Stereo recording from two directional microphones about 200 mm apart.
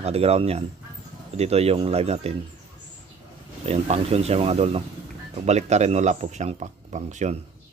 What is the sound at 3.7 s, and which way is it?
Speech, 30° right (ahead or behind).